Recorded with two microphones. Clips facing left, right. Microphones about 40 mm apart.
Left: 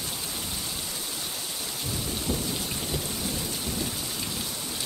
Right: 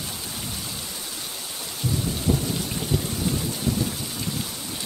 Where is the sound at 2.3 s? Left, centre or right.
Right.